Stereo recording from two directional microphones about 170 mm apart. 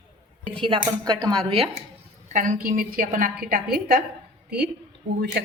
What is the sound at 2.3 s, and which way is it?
A woman's voice, 50° right (ahead or behind).